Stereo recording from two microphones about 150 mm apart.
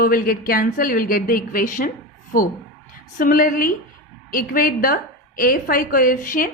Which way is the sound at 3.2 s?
65° left (ahead or behind).